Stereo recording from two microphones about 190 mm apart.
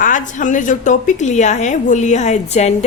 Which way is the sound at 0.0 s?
40° left (ahead or behind).